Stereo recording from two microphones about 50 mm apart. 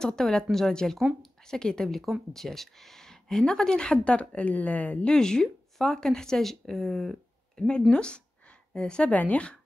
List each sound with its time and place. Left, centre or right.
0.0 s a woman's voice: centre; by 5.0 s left
5.0 s speech: centre
7.5 s speech: centre
7.9 s a sound: centre
9.1 s a woman's voice: left